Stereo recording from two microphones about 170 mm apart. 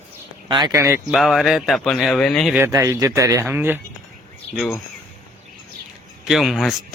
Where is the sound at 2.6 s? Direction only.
15° right (ahead or behind).